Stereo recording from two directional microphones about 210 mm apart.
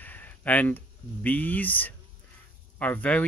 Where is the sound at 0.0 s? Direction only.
10° left (ahead or behind).